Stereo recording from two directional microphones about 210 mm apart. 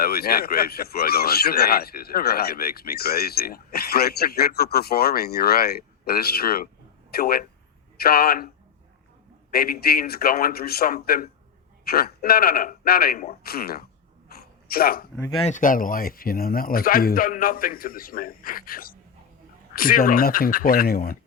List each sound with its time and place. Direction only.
0.0 s speech: 45° left (ahead or behind)
9.5 s speech: 45° left (ahead or behind)
14.3 s a sound: 45° left (ahead or behind)
15.4 s speech: 40° left (ahead or behind)